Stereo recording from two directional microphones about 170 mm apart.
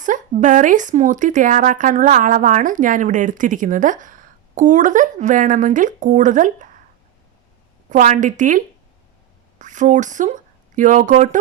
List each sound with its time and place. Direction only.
0.0 s a woman's voice: 50° right (ahead or behind)
7.9 s a woman's voice: 45° right (ahead or behind)